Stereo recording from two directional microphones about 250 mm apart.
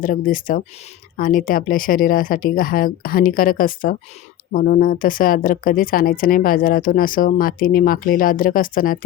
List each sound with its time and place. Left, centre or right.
0.0 s speech: left